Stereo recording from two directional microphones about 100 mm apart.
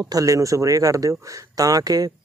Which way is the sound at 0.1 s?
35° right (ahead or behind).